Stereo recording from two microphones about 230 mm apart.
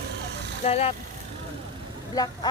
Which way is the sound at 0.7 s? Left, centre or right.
Left.